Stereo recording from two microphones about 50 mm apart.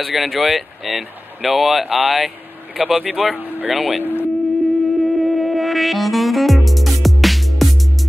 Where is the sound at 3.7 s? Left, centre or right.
Centre.